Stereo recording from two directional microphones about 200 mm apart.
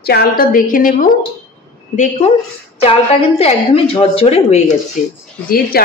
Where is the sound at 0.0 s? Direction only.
50° left (ahead or behind).